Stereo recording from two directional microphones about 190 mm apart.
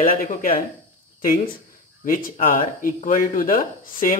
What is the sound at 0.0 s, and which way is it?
Speech, 45° left (ahead or behind).